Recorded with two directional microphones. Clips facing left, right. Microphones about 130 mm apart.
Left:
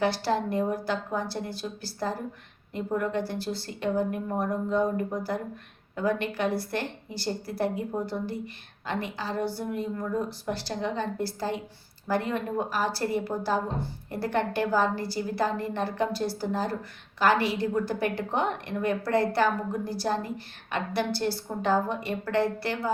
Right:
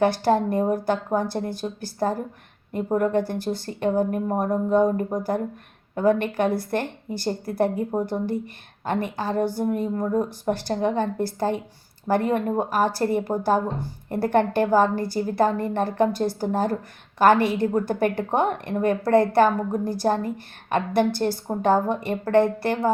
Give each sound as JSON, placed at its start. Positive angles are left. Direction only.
{"t": 0.0, "sound": "a woman's voice", "side_deg": -50}